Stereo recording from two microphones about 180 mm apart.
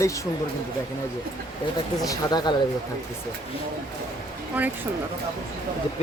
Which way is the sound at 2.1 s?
25° left (ahead or behind).